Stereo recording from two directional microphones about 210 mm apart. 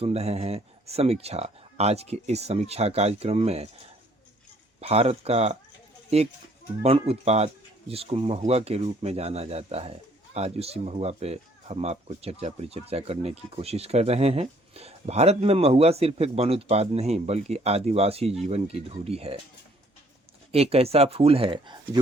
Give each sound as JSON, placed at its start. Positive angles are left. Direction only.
{"t": 0.0, "sound": "speech", "side_deg": -30}
{"t": 4.8, "sound": "speech", "side_deg": -30}
{"t": 20.5, "sound": "speech", "side_deg": -30}